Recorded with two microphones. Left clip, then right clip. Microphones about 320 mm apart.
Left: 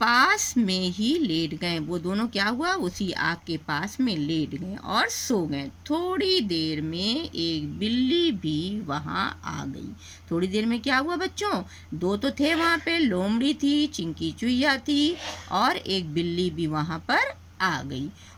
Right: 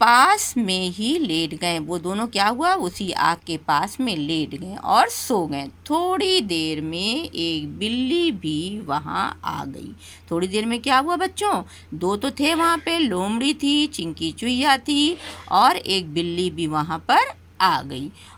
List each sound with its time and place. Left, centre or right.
0.0 s a woman's voice: centre
5.0 s speech: right
5.3 s a woman's voice: centre